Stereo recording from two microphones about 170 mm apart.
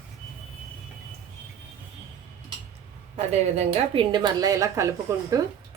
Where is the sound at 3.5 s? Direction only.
30° right (ahead or behind).